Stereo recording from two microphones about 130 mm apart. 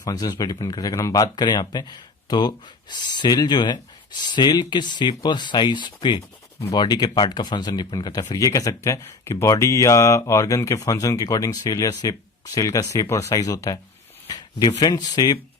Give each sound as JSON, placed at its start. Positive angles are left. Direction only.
{"t": 0.0, "sound": "speech", "side_deg": 30}
{"t": 14.3, "sound": "a sound", "side_deg": 30}
{"t": 14.8, "sound": "speech", "side_deg": 30}